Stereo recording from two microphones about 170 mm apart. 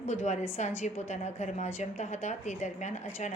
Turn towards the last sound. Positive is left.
turn(degrees=45)  # may be behind; listen again after turning